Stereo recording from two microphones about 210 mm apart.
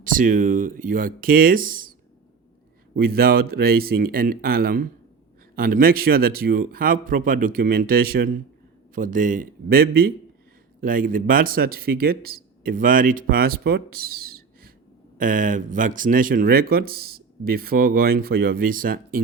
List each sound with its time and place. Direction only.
0.0 s speech: 40° right (ahead or behind)
2.9 s speech: 45° right (ahead or behind)